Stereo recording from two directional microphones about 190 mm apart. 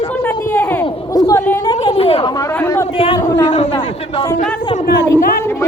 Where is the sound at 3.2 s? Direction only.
15° left (ahead or behind).